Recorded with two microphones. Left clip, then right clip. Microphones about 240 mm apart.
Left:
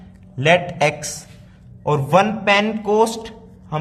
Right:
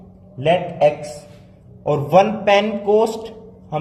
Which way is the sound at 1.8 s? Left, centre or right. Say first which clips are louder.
Right 2 dB; left.